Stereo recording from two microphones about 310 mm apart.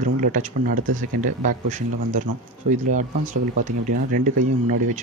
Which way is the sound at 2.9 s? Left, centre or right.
Right.